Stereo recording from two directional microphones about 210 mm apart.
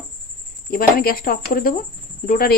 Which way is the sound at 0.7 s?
45° left (ahead or behind).